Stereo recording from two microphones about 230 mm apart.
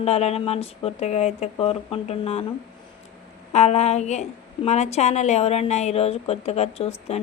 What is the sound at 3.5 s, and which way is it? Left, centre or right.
A woman's voice, left.